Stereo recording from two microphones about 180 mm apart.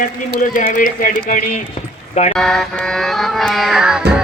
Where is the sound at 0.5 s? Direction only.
45° left (ahead or behind).